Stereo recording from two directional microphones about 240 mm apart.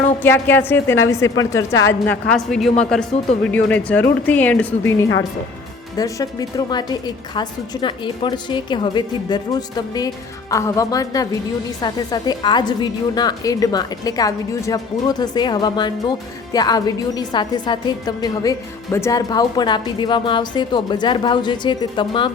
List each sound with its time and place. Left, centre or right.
0.2 s a woman's voice: centre
6.7 s a woman's voice: centre